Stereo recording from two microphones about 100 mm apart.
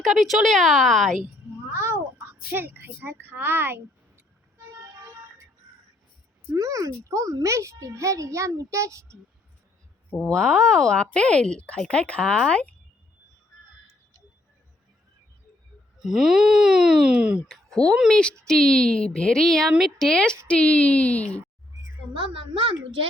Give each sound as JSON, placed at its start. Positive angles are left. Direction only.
{"t": 0.0, "sound": "speech", "side_deg": 0}
{"t": 1.7, "sound": "a child's voice", "side_deg": -25}
{"t": 6.5, "sound": "a child's voice", "side_deg": -35}
{"t": 10.1, "sound": "speech", "side_deg": 10}
{"t": 16.0, "sound": "speech", "side_deg": -5}
{"t": 17.5, "sound": "a sound", "side_deg": 5}
{"t": 18.1, "sound": "speech", "side_deg": 10}
{"t": 22.1, "sound": "a woman's voice", "side_deg": -60}